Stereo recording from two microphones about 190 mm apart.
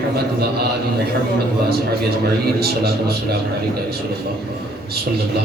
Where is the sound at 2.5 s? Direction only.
55° right (ahead or behind).